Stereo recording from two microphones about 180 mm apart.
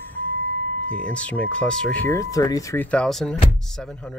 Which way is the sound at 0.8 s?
5° left (ahead or behind).